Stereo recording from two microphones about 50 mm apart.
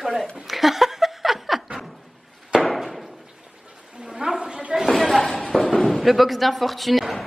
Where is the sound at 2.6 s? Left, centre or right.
Centre.